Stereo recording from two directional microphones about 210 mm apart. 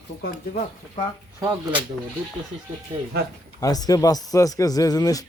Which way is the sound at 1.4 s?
15° right (ahead or behind).